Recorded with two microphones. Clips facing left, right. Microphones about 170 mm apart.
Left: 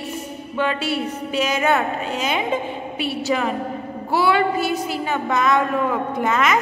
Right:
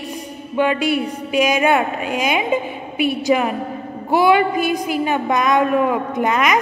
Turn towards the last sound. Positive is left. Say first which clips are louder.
# right 2 dB
turn(degrees=-15)  # may be behind; listen again after turning